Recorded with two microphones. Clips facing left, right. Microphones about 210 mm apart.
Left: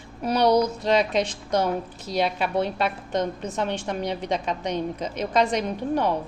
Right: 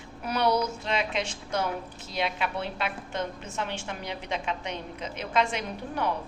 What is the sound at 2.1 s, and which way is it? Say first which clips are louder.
A woman's voice: left 7 dB; 40° left (ahead or behind).